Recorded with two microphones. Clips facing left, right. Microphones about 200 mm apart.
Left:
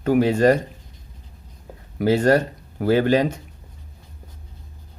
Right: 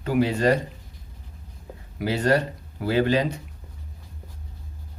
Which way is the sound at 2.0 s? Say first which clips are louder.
Left 5 dB; 50° left (ahead or behind).